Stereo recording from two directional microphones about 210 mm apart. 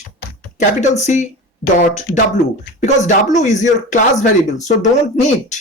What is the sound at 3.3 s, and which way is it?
Speech, 35° left (ahead or behind).